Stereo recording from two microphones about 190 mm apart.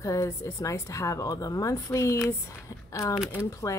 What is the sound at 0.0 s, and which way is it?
Speech, 15° left (ahead or behind).